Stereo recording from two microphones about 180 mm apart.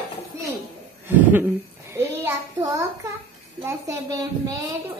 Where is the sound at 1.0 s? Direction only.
10° right (ahead or behind).